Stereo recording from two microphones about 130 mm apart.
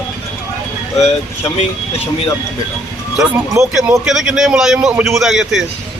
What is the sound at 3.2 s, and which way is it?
A man's voice, 5° right (ahead or behind).